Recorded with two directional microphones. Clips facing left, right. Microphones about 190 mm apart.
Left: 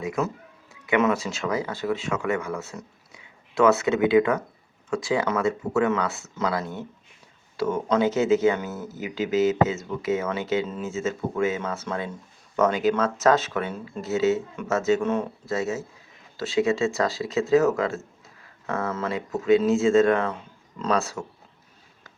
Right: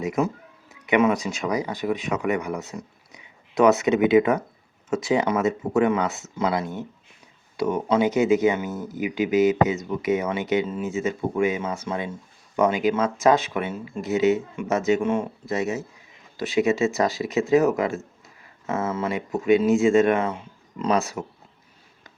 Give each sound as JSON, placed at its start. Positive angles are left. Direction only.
{"t": 0.0, "sound": "speech", "side_deg": -20}